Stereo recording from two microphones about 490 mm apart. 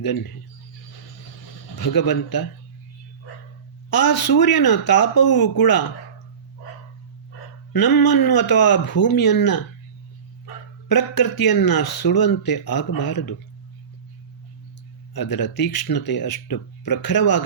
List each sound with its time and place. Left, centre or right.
0.0 s speech: left
1.7 s speech: left
3.8 s speech: left
7.7 s speech: left
15.1 s speech: left